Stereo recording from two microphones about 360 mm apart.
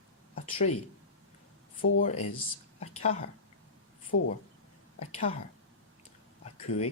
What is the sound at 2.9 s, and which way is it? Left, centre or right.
Speech, centre.